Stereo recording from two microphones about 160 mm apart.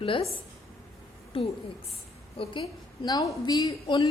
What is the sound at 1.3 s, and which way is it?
A woman's voice, 35° left (ahead or behind).